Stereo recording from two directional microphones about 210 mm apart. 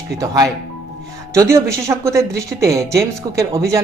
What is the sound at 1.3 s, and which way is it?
Speech, 15° right (ahead or behind).